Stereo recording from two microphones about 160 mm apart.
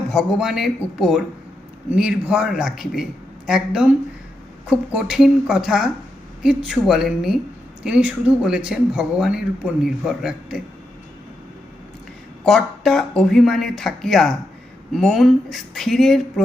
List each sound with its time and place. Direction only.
0.1 s speech: centre (ahead or behind)
12.5 s speech: centre (ahead or behind)